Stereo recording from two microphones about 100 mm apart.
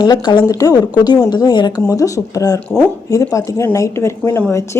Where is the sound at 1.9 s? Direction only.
35° left (ahead or behind).